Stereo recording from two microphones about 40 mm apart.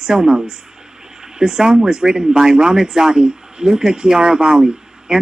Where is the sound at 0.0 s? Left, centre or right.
Centre.